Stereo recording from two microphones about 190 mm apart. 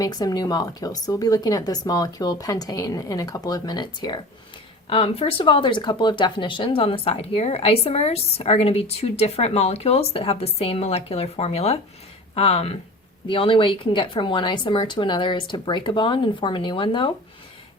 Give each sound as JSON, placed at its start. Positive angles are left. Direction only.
{"t": 0.0, "sound": "a woman's voice", "side_deg": 20}